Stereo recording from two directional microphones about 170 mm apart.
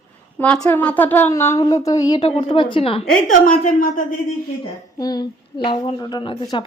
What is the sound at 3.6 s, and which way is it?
Speech, 55° left (ahead or behind).